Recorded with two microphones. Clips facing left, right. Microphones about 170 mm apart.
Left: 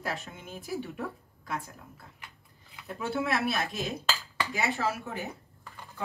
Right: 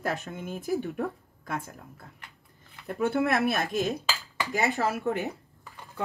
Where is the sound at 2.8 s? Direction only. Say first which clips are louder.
Right 6 dB; 55° right (ahead or behind).